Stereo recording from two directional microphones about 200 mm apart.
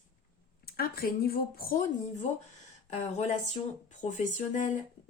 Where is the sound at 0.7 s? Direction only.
50° left (ahead or behind).